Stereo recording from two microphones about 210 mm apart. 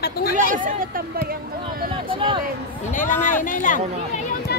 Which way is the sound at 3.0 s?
40° left (ahead or behind).